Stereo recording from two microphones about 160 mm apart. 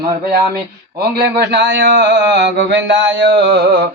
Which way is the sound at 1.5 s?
90° right.